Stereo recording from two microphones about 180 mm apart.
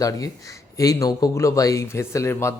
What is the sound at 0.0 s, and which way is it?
Speech, 20° left (ahead or behind).